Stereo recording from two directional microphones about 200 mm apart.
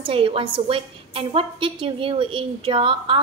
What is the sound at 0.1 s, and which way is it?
A woman's voice, 25° right (ahead or behind).